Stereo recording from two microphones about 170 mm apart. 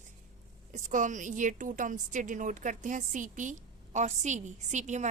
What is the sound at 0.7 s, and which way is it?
A woman's voice, 45° right (ahead or behind).